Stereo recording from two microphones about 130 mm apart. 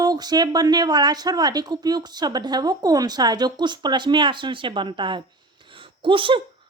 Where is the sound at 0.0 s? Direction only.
30° right (ahead or behind).